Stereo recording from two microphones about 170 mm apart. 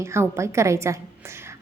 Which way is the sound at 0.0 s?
15° right (ahead or behind).